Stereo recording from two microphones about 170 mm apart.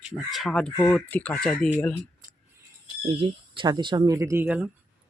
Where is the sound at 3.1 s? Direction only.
30° right (ahead or behind); by 4.7 s 10° right (ahead or behind).